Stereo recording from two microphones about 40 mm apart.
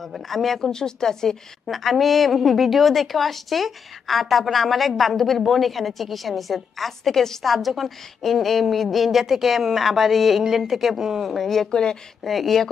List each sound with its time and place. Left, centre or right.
0.1 s speech: centre
1.7 s a woman's voice: centre
11.3 s speech: centre
11.7 s speech: centre
12.3 s a woman's voice: centre